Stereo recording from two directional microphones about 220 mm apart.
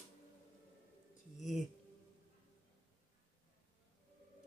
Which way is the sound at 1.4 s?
Centre (ahead or behind).